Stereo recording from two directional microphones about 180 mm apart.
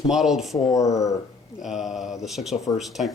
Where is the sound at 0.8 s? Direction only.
15° left (ahead or behind).